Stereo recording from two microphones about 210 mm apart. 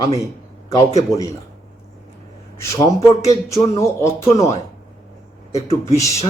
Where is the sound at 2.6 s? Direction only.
15° left (ahead or behind).